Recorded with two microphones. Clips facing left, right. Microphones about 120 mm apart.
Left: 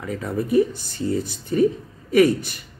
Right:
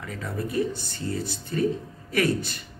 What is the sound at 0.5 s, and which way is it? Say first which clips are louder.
Speech: left 9 dB; 15° left (ahead or behind).